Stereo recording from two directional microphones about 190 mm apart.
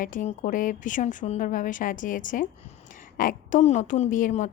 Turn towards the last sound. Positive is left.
turn(degrees=40)  # may be behind; listen again after turning